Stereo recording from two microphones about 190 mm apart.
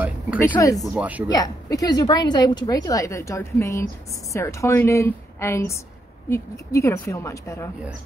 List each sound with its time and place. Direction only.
0.4 s a woman's voice: 15° left (ahead or behind)
0.9 s speech: 10° right (ahead or behind)
1.3 s a woman's voice: 20° left (ahead or behind)